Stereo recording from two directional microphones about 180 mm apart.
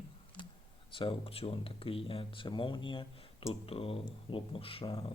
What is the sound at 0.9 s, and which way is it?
Speech, 30° left (ahead or behind).